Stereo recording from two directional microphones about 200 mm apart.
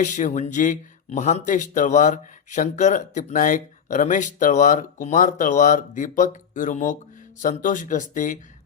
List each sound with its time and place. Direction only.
0.0 s speech: 40° left (ahead or behind)